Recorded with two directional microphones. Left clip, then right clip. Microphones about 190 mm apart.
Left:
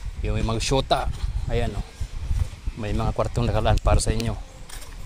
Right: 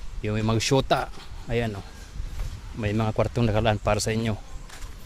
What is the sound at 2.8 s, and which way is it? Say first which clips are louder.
Speech: right 1 dB; 45° right (ahead or behind).